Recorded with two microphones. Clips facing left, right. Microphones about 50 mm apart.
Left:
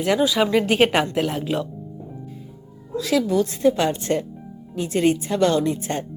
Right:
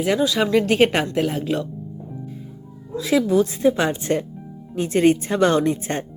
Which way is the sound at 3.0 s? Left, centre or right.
Centre.